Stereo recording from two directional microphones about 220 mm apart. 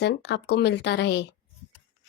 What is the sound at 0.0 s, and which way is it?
A woman's voice, 50° left (ahead or behind).